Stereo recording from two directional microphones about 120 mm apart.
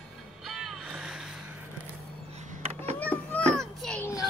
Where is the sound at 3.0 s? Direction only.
15° left (ahead or behind).